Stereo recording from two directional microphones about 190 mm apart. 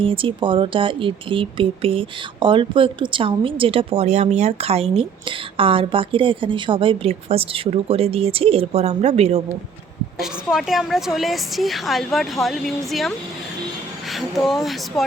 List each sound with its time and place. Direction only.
0.0 s a woman's voice: 25° right (ahead or behind)
10.2 s a woman's voice: centre (ahead or behind)